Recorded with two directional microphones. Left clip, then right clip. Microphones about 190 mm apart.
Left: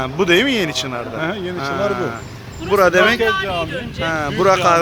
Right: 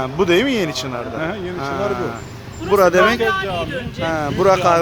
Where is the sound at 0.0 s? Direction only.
Centre (ahead or behind).